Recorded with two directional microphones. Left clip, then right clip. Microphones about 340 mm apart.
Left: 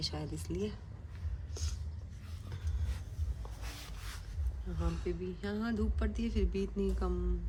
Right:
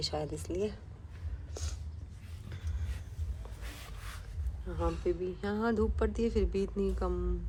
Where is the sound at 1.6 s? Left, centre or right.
Centre.